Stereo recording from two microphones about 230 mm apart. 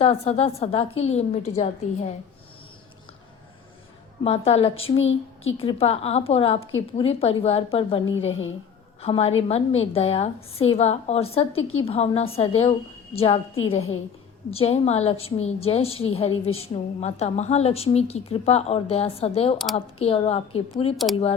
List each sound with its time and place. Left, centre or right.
0.0 s a woman's voice: left
4.2 s a woman's voice: left
4.8 s a woman's voice: left
5.5 s a woman's voice: left
8.0 s a woman's voice: left
9.0 s a woman's voice: left
11.5 s a woman's voice: left
11.9 s a woman's voice: left
14.5 s a woman's voice: left
20.9 s speech: centre